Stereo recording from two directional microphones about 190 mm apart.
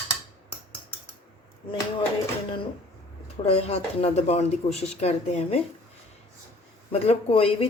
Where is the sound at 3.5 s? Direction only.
30° left (ahead or behind).